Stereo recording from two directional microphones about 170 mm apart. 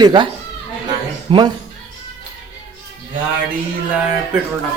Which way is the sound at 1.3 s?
30° right (ahead or behind).